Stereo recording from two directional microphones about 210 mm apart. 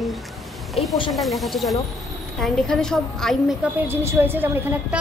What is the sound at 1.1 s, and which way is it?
Speech, centre (ahead or behind).